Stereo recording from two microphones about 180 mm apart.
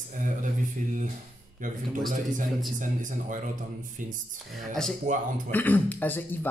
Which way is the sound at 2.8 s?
45° right (ahead or behind).